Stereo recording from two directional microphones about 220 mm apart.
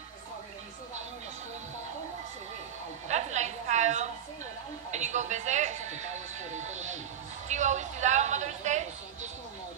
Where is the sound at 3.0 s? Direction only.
30° right (ahead or behind).